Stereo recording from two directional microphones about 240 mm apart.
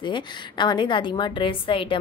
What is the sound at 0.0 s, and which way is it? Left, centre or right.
A woman's voice, centre.